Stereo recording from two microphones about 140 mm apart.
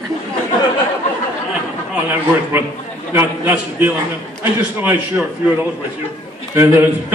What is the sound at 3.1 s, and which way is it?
A man's voice, 15° right (ahead or behind).